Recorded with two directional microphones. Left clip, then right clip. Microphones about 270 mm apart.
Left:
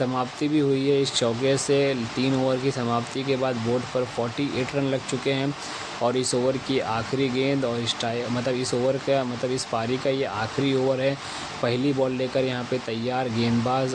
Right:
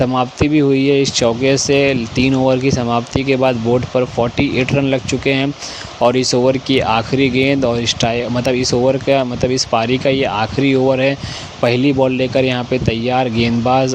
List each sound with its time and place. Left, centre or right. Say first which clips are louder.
0.0 s speech: right 10 dB; right